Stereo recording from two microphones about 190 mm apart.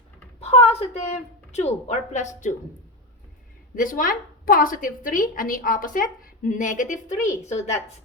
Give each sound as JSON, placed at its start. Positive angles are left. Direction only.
{"t": 0.3, "sound": "a woman's voice", "side_deg": 35}
{"t": 3.8, "sound": "a woman's voice", "side_deg": 45}